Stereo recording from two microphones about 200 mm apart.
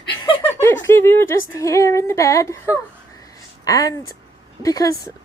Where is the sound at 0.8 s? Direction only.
10° left (ahead or behind).